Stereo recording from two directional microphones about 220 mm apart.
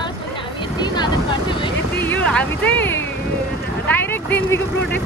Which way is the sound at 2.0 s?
5° left (ahead or behind).